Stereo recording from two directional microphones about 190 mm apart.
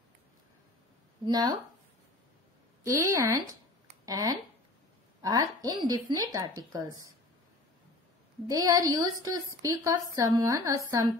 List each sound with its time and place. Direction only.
1.2 s speech: 20° right (ahead or behind)
2.8 s a woman's voice: 15° right (ahead or behind)
8.5 s a woman's voice: 20° right (ahead or behind)